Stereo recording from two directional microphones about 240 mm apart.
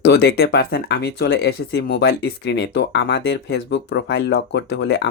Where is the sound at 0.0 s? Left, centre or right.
Left.